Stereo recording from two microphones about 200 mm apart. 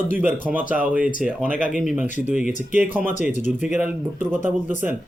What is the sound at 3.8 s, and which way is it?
Speech, 10° right (ahead or behind).